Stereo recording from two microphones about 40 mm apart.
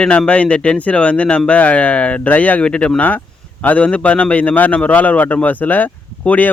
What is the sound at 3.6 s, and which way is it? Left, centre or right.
Speech, left.